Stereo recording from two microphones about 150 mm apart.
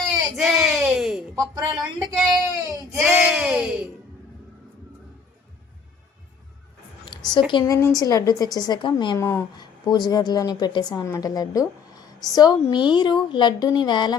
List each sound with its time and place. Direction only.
0.3 s a sound: centre (ahead or behind)
1.4 s speech: 30° right (ahead or behind)
3.0 s speech: centre (ahead or behind)
7.1 s a sound: 30° left (ahead or behind)
7.5 s a woman's voice: 20° left (ahead or behind)
9.1 s a woman's voice: 20° left (ahead or behind)